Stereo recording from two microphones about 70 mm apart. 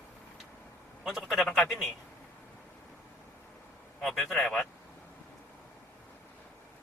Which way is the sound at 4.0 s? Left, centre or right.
Centre.